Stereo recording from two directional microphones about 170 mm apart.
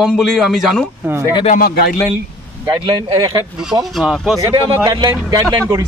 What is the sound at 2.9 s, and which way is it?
Speech, 30° right (ahead or behind).